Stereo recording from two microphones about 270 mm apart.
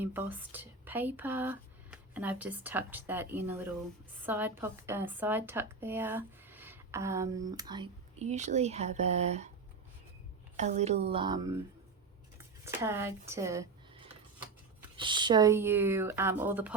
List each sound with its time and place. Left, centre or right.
0.0 s a woman's voice: centre; by 9.5 s right
10.6 s a woman's voice: right
12.4 s a sound: centre
14.9 s a woman's voice: centre